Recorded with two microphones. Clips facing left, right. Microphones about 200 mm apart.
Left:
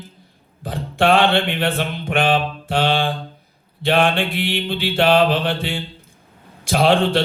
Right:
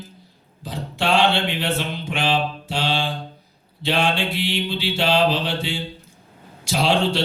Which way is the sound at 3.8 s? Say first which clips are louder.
Left 4 dB; 55° left (ahead or behind).